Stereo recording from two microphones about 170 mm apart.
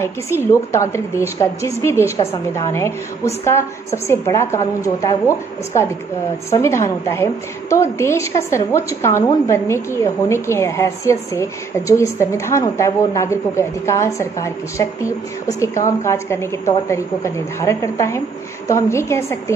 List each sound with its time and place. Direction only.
0.5 s a woman's voice: 15° left (ahead or behind)
6.5 s a woman's voice: 15° left (ahead or behind)